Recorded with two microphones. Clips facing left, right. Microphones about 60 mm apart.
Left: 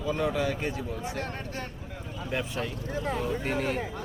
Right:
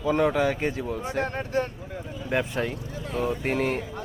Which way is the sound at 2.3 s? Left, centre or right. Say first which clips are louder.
Right 6 dB; right.